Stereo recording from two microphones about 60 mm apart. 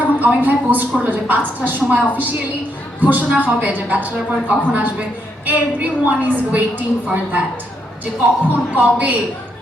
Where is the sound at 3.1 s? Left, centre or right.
Right.